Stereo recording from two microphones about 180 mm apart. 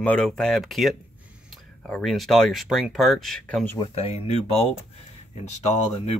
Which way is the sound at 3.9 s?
35° left (ahead or behind).